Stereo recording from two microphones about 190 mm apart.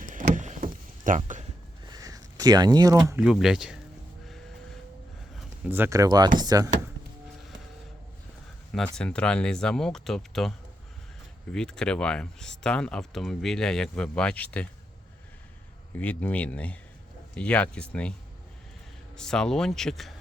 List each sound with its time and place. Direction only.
0.0 s vehicle: 45° right (ahead or behind)
1.9 s a sound: 20° right (ahead or behind)
3.2 s speech: centre (ahead or behind)
5.6 s speech: 10° right (ahead or behind)
8.7 s speech: 5° left (ahead or behind)
11.5 s speech: 5° left (ahead or behind)
16.0 s speech: 10° left (ahead or behind)
19.1 s speech: 5° left (ahead or behind)